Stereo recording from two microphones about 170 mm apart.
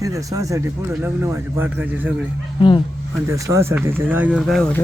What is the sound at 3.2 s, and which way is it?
Speech, 20° right (ahead or behind).